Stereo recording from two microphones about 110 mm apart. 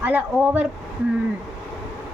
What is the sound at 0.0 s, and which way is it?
Speech, 15° right (ahead or behind).